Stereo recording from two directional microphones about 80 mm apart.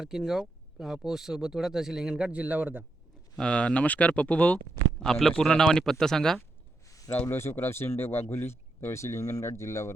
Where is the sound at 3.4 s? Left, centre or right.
Centre.